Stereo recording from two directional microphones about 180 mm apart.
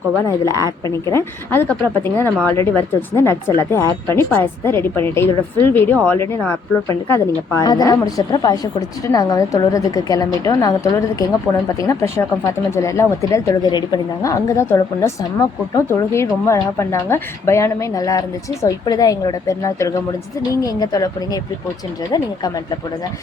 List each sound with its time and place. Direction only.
0.3 s a woman's voice: 20° left (ahead or behind)